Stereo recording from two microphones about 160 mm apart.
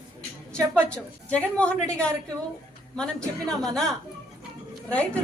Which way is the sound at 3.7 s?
5° left (ahead or behind).